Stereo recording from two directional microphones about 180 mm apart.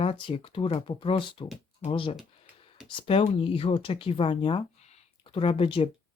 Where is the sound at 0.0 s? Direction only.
30° left (ahead or behind).